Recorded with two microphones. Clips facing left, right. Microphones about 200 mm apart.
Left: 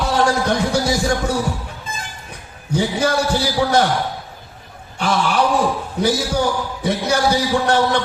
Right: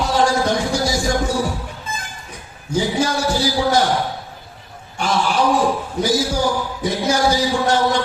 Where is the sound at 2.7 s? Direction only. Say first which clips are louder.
Left 1 dB; 60° left (ahead or behind).